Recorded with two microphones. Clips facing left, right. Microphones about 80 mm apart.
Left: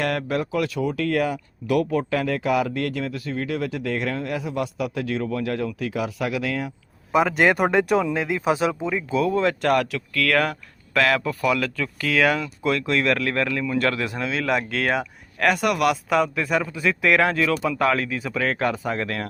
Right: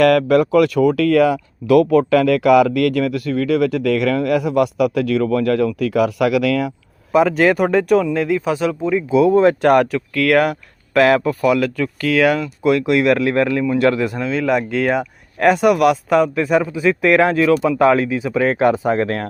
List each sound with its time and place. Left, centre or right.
0.0 s speech: right
7.1 s speech: centre
8.8 s speech: centre
9.0 s speech: centre
9.3 s speech: right
9.6 s speech: right
10.2 s speech: centre
18.8 s speech: right